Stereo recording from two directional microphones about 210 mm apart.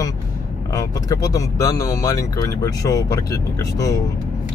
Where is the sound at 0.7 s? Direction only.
15° left (ahead or behind).